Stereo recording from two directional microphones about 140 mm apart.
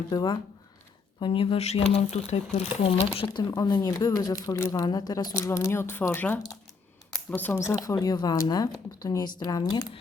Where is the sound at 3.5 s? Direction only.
30° left (ahead or behind); by 7.6 s 15° left (ahead or behind).